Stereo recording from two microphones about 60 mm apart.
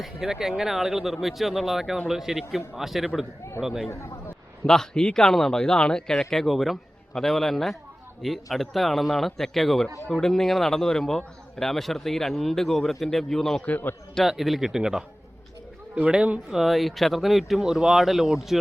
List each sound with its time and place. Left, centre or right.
0.0 s speech: centre
4.6 s speech: centre
6.1 s speech: centre
13.7 s a man's voice: left
14.3 s speech: centre
16.1 s speech: right
16.5 s speech: centre